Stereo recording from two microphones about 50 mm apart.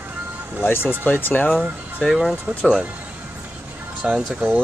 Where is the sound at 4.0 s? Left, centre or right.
Centre.